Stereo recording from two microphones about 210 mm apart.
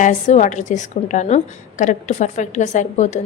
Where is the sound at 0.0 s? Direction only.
35° left (ahead or behind).